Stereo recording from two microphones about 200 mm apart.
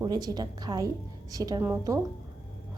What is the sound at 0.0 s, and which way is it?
A woman's voice, 20° right (ahead or behind).